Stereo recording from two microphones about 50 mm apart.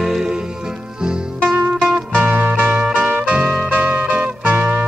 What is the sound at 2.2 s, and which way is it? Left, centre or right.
Music, right.